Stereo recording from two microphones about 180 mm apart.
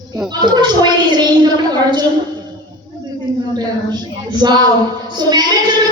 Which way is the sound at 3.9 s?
25° right (ahead or behind).